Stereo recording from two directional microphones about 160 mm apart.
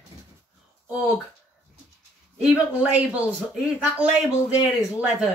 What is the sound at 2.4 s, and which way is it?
Speech, 5° right (ahead or behind).